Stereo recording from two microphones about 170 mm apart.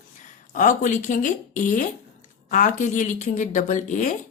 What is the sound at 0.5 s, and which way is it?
A woman's voice, 50° left (ahead or behind).